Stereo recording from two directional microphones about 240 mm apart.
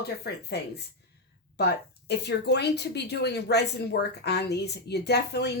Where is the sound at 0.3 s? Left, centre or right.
Left.